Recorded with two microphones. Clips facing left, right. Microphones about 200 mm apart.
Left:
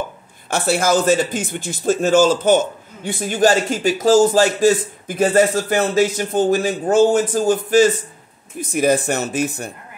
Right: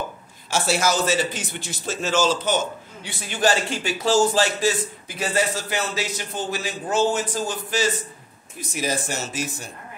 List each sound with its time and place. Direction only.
0.5 s speech: 55° left (ahead or behind)